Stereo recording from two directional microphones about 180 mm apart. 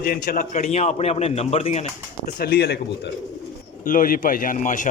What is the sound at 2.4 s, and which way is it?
Speech, 65° left (ahead or behind).